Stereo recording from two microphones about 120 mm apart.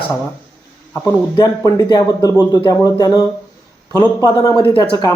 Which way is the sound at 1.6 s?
30° left (ahead or behind).